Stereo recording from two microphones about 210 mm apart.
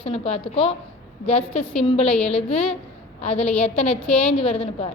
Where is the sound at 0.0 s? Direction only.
30° left (ahead or behind).